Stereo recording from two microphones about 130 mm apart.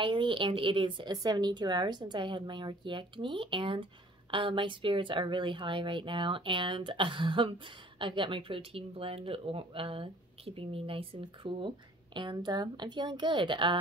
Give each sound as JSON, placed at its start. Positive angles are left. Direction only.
{"t": 0.0, "sound": "speech", "side_deg": -40}